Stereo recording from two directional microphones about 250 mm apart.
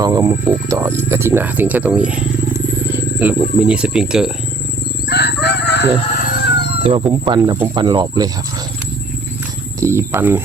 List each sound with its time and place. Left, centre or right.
0.0 s speech: centre
5.0 s chicken: left
6.8 s speech: right
9.8 s speech: centre